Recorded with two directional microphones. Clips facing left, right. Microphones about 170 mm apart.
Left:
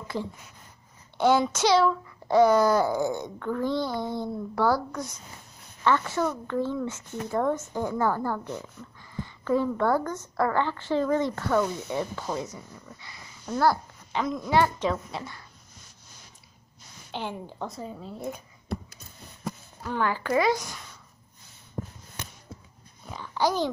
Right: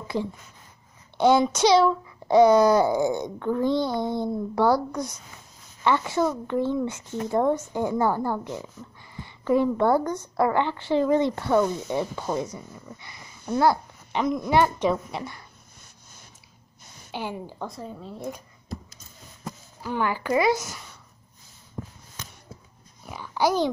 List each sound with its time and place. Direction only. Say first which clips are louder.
0.1 s a woman's voice: right 5 dB; 15° right (ahead or behind)
17.1 s a woman's voice: right 2 dB; 5° right (ahead or behind)
18.7 s a sound: left 3 dB; 65° left (ahead or behind)
19.8 s a woman's voice: right 1 dB; 10° right (ahead or behind)
23.0 s a child's voice: right 2 dB; 10° right (ahead or behind)